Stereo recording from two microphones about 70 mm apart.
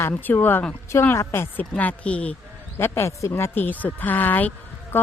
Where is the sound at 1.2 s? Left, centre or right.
Left.